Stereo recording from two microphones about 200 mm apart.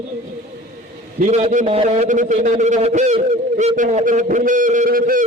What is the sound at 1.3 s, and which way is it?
A man's voice, 35° right (ahead or behind).